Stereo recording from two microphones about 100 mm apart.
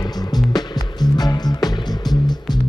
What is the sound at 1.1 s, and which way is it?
Music, 40° left (ahead or behind).